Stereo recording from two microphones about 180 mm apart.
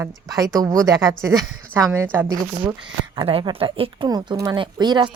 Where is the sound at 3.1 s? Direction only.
30° right (ahead or behind).